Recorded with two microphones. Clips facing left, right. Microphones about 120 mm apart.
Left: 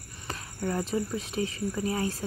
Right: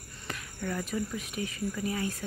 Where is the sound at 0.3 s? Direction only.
30° left (ahead or behind).